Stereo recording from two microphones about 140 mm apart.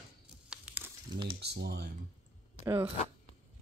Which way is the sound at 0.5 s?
10° right (ahead or behind).